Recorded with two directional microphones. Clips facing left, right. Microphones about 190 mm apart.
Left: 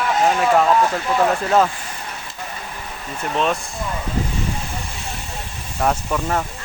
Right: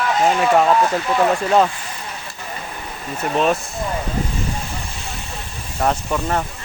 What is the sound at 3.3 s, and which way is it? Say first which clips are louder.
Speech: right 3 dB; 5° right (ahead or behind).